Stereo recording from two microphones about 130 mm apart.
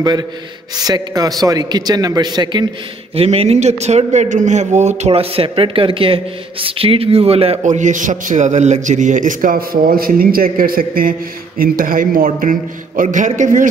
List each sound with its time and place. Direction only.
0.8 s a man's voice: 30° right (ahead or behind)
3.2 s speech: 50° right (ahead or behind)
7.6 s a man's voice: 70° right (ahead or behind)